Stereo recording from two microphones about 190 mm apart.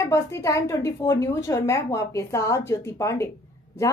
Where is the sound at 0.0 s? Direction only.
15° left (ahead or behind).